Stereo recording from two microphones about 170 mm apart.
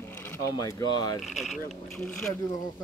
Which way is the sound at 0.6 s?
20° left (ahead or behind).